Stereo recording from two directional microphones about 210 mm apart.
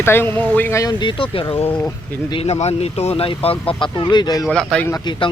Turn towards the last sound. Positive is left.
turn(degrees=20)  # may be behind; listen again after turning